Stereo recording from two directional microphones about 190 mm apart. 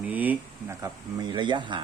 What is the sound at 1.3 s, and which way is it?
Speech, 25° right (ahead or behind).